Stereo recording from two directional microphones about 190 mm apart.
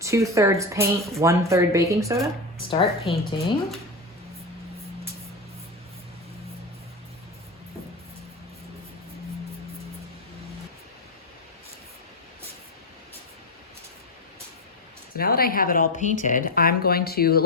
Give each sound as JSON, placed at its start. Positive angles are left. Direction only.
{"t": 0.0, "sound": "speech", "side_deg": -15}
{"t": 2.6, "sound": "a woman's voice", "side_deg": 30}
{"t": 15.1, "sound": "speech", "side_deg": 50}